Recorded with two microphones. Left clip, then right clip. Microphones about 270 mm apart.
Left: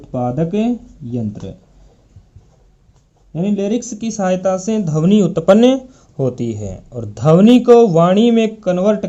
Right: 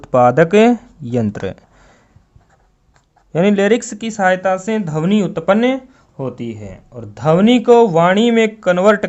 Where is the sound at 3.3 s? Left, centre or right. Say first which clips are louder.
Right 6 dB; right.